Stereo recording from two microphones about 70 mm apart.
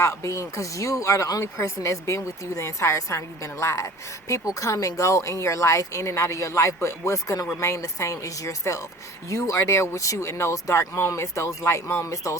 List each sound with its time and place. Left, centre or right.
0.0 s speech: left